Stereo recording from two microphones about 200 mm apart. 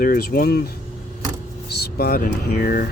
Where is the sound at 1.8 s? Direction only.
50° left (ahead or behind).